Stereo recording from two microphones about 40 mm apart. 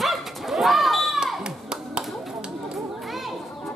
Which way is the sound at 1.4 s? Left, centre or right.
Right.